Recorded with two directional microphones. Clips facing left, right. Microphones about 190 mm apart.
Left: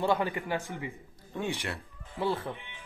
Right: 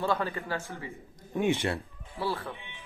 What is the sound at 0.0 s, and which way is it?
Speech, 15° left (ahead or behind).